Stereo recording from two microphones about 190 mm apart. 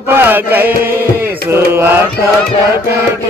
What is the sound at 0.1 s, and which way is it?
Music, 10° right (ahead or behind).